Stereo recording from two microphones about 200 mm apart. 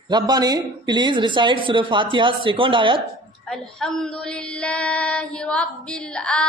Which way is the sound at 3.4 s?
5° left (ahead or behind).